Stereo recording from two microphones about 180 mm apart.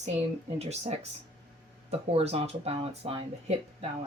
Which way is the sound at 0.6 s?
35° right (ahead or behind).